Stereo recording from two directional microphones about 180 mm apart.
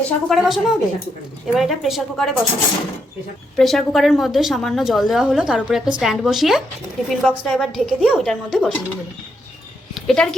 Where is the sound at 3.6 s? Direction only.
Centre (ahead or behind).